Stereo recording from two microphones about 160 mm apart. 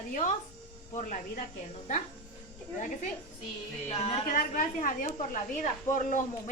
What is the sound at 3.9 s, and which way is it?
Music, 35° left (ahead or behind).